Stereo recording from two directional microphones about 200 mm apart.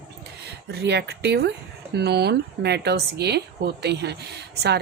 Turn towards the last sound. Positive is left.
turn(degrees=-55)  # may be behind; listen again after turning